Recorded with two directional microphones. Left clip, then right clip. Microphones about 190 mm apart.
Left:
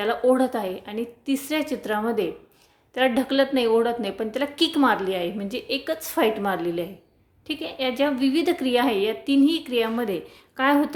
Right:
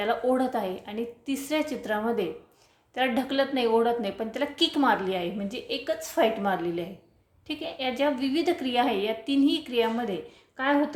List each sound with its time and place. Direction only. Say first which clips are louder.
0.0 s a woman's voice: left 5 dB; 20° left (ahead or behind)